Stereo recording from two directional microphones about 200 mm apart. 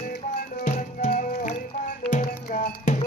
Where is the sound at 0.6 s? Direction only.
35° left (ahead or behind).